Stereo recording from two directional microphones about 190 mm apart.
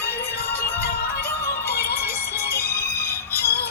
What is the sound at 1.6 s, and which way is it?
Music, 55° left (ahead or behind).